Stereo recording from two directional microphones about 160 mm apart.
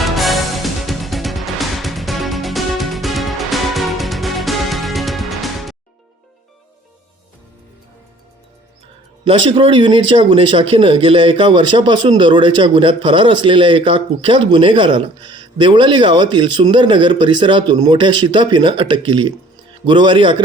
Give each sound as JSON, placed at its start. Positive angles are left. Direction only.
{"t": 0.0, "sound": "music", "side_deg": 0}
{"t": 9.2, "sound": "speech", "side_deg": -35}